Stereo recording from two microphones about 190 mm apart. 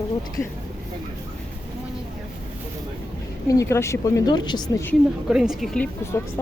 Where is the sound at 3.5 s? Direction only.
15° left (ahead or behind).